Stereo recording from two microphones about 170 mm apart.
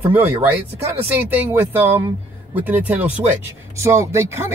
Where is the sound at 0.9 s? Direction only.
10° right (ahead or behind).